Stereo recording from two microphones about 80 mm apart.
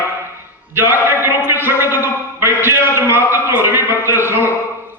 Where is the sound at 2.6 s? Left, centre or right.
Right.